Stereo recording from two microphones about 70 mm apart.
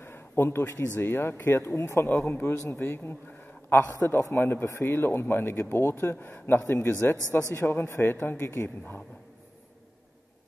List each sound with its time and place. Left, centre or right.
0.0 s a sound: left
0.9 s speech: left
7.2 s speech: right
7.5 s speech: left